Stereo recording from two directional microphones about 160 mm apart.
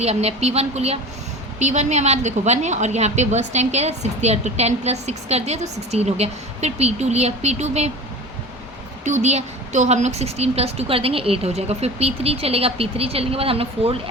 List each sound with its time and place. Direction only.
0.0 s a woman's voice: 40° right (ahead or behind)
9.0 s a woman's voice: 45° right (ahead or behind)